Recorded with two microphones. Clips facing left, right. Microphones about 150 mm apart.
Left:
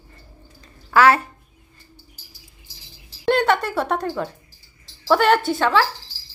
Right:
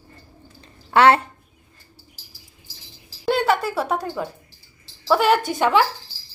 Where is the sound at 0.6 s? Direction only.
30° right (ahead or behind).